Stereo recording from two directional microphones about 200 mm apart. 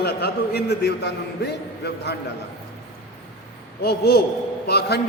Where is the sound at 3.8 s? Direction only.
55° left (ahead or behind).